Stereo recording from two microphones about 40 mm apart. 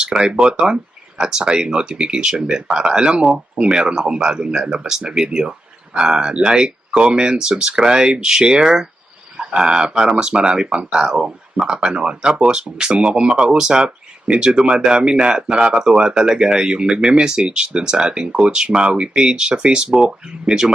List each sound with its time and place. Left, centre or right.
0.0 s speech: centre